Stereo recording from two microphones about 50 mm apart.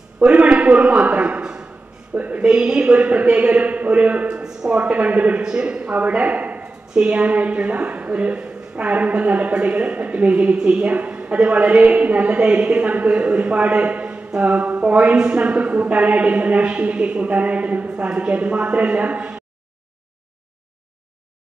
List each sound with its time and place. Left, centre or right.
0.2 s a sound: right
2.1 s a sound: right
2.4 s a woman's voice: centre
4.3 s speech: centre
4.8 s a woman's voice: right
5.4 s a man's voice: centre
6.9 s a woman's voice: right